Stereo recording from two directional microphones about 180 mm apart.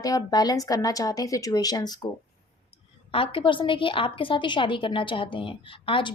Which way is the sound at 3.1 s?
30° left (ahead or behind).